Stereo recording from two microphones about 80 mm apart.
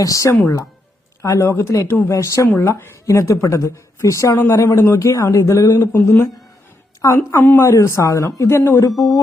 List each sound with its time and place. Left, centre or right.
0.0 s a woman's voice: left
7.3 s speech: left
7.6 s speech: left
8.9 s a sound: centre